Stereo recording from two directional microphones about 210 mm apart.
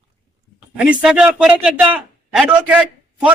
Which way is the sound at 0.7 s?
5° right (ahead or behind).